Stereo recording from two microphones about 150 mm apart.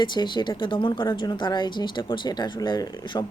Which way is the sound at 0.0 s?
30° left (ahead or behind).